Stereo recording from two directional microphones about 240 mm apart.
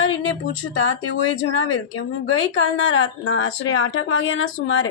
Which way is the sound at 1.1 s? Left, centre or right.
Left.